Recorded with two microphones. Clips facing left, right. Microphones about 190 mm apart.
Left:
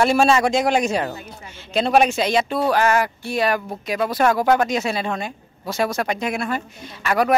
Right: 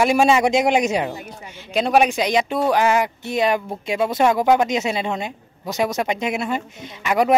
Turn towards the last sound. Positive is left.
turn(degrees=-20)  # may be behind; listen again after turning